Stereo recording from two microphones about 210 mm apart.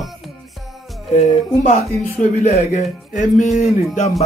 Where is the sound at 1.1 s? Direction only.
30° left (ahead or behind).